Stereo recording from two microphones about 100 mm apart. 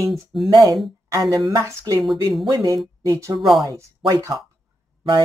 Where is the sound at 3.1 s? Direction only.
35° right (ahead or behind).